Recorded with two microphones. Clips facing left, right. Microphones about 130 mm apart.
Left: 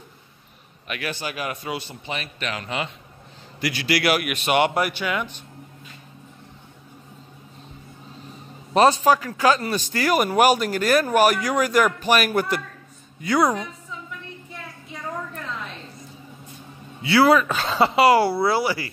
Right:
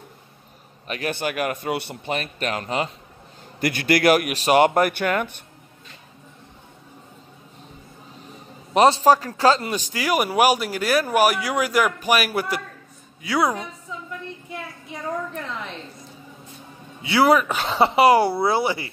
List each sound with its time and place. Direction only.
0.8 s a man's voice: 35° right (ahead or behind)
1.1 s speech: 55° right (ahead or behind)
2.1 s speech: 45° right (ahead or behind)
3.6 s speech: 50° right (ahead or behind)
8.7 s a man's voice: 25° right (ahead or behind)
9.0 s speech: 35° right (ahead or behind)
9.7 s speech: 15° right (ahead or behind)
17.0 s speech: 20° right (ahead or behind)